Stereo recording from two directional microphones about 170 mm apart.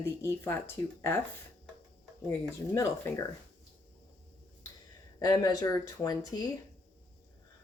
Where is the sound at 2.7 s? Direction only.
15° left (ahead or behind).